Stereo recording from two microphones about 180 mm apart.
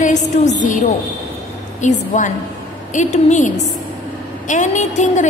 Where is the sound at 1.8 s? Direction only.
45° left (ahead or behind).